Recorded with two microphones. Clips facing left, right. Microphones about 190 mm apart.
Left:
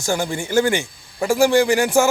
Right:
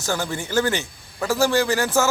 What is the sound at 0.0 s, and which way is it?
A man's voice, 10° left (ahead or behind).